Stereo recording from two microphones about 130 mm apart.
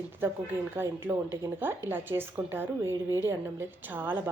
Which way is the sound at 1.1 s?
10° right (ahead or behind).